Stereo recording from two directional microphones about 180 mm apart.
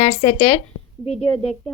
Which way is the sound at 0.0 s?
35° left (ahead or behind).